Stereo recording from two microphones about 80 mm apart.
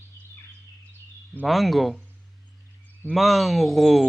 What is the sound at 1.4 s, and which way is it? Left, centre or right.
Speech, centre.